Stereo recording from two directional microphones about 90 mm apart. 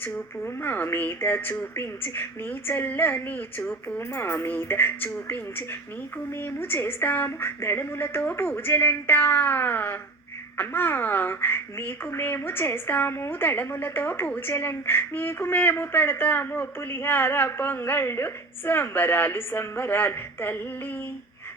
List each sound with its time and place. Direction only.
0.0 s speech: 20° left (ahead or behind)